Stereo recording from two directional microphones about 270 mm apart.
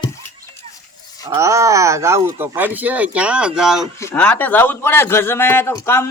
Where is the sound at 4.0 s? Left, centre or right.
Centre.